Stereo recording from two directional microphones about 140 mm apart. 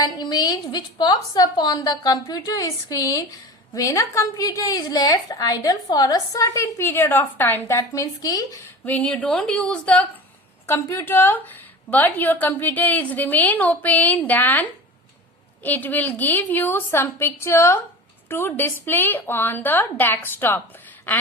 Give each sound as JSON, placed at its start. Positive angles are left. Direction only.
{"t": 0.0, "sound": "a woman's voice", "side_deg": 30}
{"t": 8.8, "sound": "a woman's voice", "side_deg": 10}
{"t": 10.7, "sound": "a woman's voice", "side_deg": 20}